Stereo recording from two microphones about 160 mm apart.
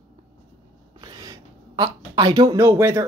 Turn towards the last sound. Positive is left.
turn(degrees=-15)  # may be behind; listen again after turning